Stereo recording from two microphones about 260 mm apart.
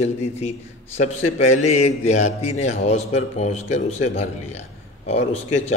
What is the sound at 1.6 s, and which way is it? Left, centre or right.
A man's voice, left.